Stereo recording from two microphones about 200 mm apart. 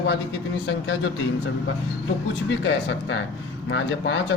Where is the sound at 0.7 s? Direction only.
75° left (ahead or behind).